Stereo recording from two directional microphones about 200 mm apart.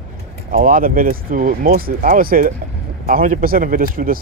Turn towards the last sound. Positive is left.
turn(degrees=-45)  # may be behind; listen again after turning